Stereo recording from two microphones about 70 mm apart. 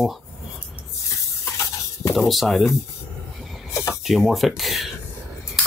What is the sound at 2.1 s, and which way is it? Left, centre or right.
Speech, centre.